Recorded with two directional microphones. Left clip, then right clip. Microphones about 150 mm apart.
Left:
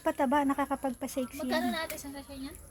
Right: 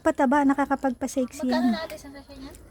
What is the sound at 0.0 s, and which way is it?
Speech, 90° right.